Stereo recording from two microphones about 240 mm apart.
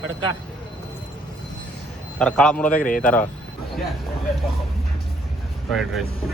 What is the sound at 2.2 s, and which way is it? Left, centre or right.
Speech, centre.